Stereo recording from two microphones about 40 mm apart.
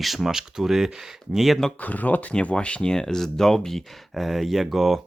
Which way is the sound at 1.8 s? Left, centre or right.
Left.